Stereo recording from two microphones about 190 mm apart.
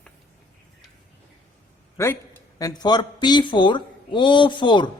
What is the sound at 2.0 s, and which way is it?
Speech, 15° left (ahead or behind).